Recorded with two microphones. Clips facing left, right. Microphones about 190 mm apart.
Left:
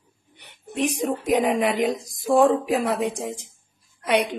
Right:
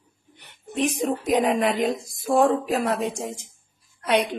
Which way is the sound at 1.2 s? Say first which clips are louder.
Left 1 dB; 10° left (ahead or behind).